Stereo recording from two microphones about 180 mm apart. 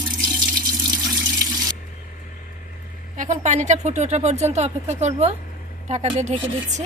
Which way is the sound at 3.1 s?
45° right (ahead or behind).